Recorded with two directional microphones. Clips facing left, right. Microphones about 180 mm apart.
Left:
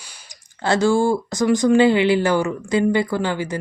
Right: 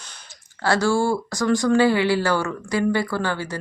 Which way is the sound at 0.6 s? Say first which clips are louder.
Left 3 dB; 20° left (ahead or behind).